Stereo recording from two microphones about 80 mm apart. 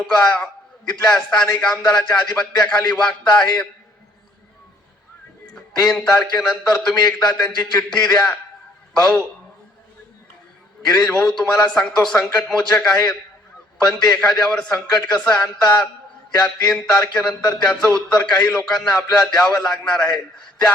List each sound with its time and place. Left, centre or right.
0.3 s a man's voice: centre
5.8 s a man's voice: centre
10.9 s a man's voice: centre